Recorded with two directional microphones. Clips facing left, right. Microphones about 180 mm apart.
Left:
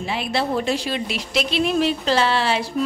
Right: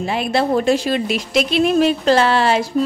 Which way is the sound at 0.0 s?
50° right (ahead or behind).